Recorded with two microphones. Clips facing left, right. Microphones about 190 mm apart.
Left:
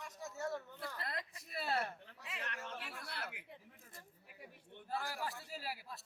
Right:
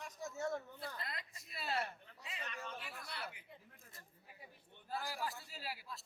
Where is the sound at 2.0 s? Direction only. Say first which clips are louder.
Left 2 dB; 70° left (ahead or behind).